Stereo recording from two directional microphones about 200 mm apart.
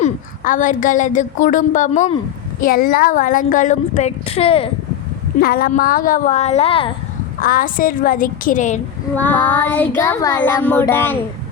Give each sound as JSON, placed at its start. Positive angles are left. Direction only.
{"t": 0.0, "sound": "a woman's voice", "side_deg": 40}
{"t": 2.6, "sound": "a woman's voice", "side_deg": 45}
{"t": 5.4, "sound": "a woman's voice", "side_deg": 50}
{"t": 7.4, "sound": "a woman's voice", "side_deg": 45}
{"t": 9.1, "sound": "child singing", "side_deg": 10}